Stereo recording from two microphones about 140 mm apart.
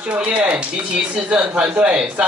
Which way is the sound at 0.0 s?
5° right (ahead or behind).